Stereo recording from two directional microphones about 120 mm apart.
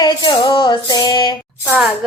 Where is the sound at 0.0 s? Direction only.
40° left (ahead or behind).